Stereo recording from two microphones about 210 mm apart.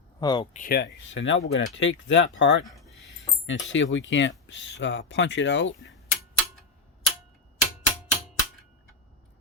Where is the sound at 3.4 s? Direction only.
65° left (ahead or behind).